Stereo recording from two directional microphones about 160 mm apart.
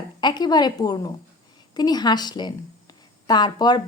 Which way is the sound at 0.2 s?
25° left (ahead or behind).